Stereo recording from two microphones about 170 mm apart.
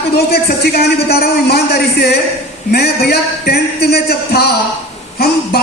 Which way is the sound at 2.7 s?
70° left (ahead or behind).